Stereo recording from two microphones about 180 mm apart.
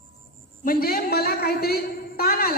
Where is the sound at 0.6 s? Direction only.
55° left (ahead or behind).